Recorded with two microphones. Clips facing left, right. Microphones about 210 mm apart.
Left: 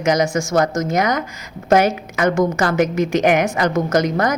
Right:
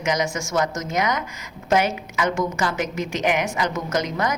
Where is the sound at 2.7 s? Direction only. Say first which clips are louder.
Left 9 dB; 45° left (ahead or behind).